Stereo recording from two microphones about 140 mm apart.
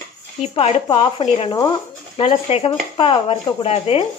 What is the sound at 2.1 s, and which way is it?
A woman's voice, 45° left (ahead or behind).